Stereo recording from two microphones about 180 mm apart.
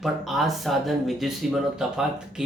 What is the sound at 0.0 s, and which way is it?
Speech, centre (ahead or behind).